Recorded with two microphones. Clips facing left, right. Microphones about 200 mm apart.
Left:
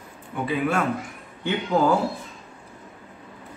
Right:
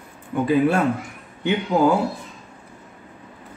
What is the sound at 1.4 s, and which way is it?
Speech, 15° right (ahead or behind).